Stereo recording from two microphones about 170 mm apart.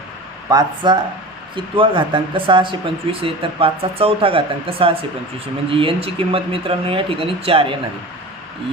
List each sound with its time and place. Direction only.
0.4 s speech: 25° right (ahead or behind)